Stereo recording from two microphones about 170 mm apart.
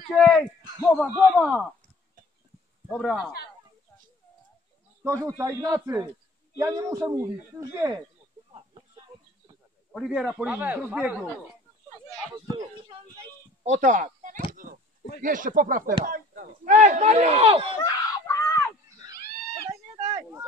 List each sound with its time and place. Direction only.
0.1 s a man's voice: centre (ahead or behind)
2.9 s speech: centre (ahead or behind)
5.0 s a man's voice: 20° right (ahead or behind)
9.9 s a man's voice: 5° right (ahead or behind)
13.6 s a sound: 50° right (ahead or behind)
15.2 s speech: 55° right (ahead or behind); by 17.7 s 35° right (ahead or behind)
17.8 s screaming: 15° left (ahead or behind)
19.1 s a sound: 70° left (ahead or behind)